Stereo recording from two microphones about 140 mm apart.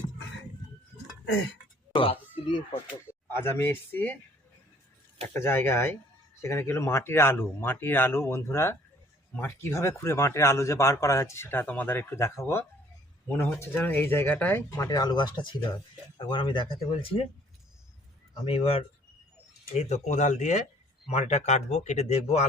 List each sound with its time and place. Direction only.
1.9 s speech: 40° left (ahead or behind)
3.2 s speech: 15° left (ahead or behind)
5.3 s speech: 15° left (ahead or behind)
14.8 s speech: 25° left (ahead or behind)
18.4 s speech: 45° left (ahead or behind)